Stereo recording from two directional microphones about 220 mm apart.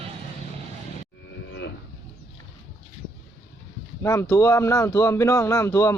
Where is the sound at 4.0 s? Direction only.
15° left (ahead or behind).